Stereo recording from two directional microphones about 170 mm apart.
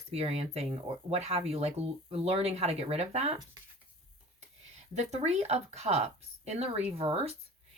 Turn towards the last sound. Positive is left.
turn(degrees=-35)  # may be behind; listen again after turning